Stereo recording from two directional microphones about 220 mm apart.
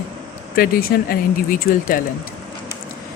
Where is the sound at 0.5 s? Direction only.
40° left (ahead or behind).